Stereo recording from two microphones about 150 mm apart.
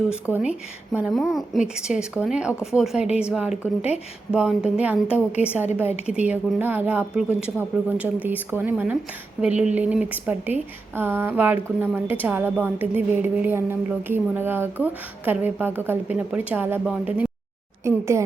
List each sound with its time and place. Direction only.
0.3 s speech: 10° right (ahead or behind)
17.8 s speech: 20° right (ahead or behind)